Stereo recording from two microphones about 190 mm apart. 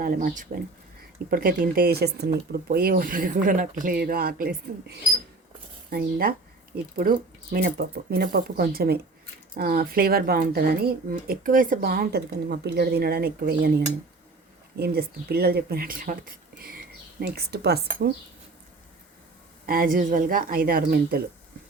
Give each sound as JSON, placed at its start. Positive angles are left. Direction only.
{"t": 0.0, "sound": "speech", "side_deg": -45}
{"t": 19.6, "sound": "speech", "side_deg": -50}